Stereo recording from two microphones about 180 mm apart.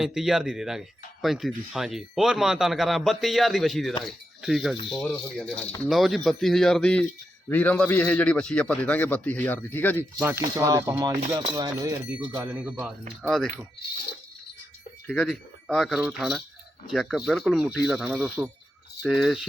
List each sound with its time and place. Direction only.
0.0 s speech: centre (ahead or behind)
4.0 s mechanisms: centre (ahead or behind)
4.9 s a man's voice: 5° left (ahead or behind)
10.2 s speech: 15° right (ahead or behind)
12.1 s speech: 10° right (ahead or behind)
15.0 s speech: 5° left (ahead or behind)